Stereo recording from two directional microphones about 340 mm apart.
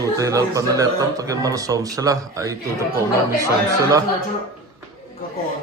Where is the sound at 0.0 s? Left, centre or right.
Centre.